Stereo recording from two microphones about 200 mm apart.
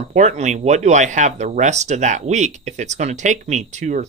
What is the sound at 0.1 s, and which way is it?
Speech, 35° right (ahead or behind).